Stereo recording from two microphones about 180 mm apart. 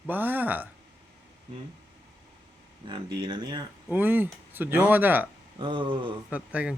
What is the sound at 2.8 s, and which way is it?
Speech, 25° right (ahead or behind).